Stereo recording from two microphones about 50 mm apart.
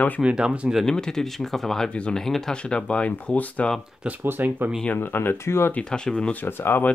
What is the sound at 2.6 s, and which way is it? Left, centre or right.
Speech, centre.